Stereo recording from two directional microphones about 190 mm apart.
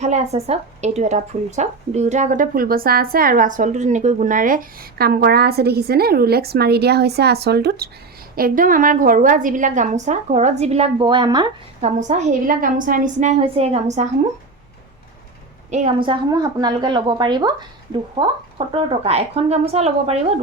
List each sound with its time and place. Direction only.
0.0 s speech: 35° right (ahead or behind); by 7.9 s 55° right (ahead or behind)
8.4 s a woman's voice: 45° right (ahead or behind); by 11.5 s 25° right (ahead or behind)
11.8 s a woman's voice: 40° right (ahead or behind)
15.7 s a woman's voice: 30° right (ahead or behind)